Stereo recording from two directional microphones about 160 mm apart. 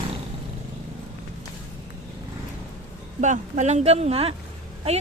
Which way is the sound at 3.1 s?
50° right (ahead or behind).